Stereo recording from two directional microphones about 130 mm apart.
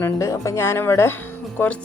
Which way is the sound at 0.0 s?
25° left (ahead or behind).